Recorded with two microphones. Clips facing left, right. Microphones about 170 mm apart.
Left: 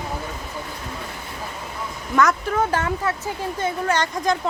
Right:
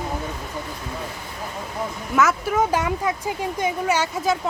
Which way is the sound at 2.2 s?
5° right (ahead or behind).